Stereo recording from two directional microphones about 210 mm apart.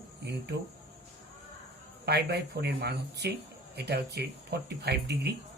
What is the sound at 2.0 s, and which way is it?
Speech, 50° right (ahead or behind).